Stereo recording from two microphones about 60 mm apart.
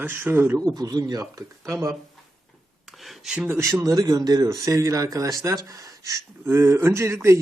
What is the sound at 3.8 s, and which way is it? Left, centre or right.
Speech, right.